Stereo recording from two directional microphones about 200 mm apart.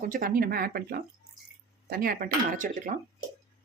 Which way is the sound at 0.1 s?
45° right (ahead or behind).